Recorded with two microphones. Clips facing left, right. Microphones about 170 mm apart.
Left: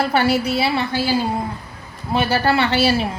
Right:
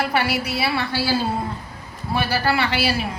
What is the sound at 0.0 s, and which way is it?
A man's voice, 30° left (ahead or behind).